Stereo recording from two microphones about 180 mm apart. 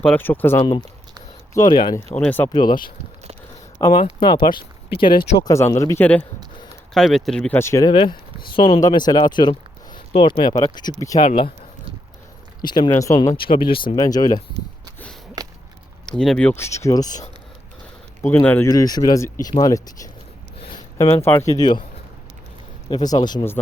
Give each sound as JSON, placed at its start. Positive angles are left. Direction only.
{"t": 0.0, "sound": "speech", "side_deg": 10}
{"t": 1.5, "sound": "speech", "side_deg": 25}
{"t": 2.5, "sound": "speech", "side_deg": 25}
{"t": 3.9, "sound": "speech", "side_deg": 25}
{"t": 12.6, "sound": "speech", "side_deg": 25}
{"t": 13.3, "sound": "speech", "side_deg": 30}
{"t": 16.0, "sound": "speech", "side_deg": 5}
{"t": 18.2, "sound": "speech", "side_deg": 10}
{"t": 22.9, "sound": "speech", "side_deg": 25}